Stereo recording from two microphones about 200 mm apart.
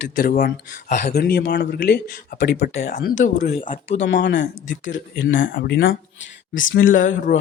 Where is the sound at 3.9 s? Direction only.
60° left (ahead or behind).